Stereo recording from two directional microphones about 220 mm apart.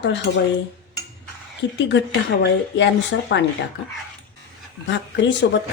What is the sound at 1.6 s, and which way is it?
A woman's voice, 55° left (ahead or behind).